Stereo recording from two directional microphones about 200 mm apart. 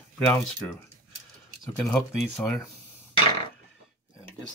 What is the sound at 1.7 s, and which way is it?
Speech, 5° left (ahead or behind).